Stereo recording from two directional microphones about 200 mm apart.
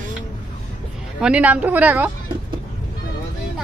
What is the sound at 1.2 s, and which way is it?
Speech, 5° right (ahead or behind).